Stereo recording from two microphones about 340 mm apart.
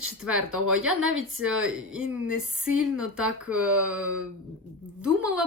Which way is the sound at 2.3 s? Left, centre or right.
Right.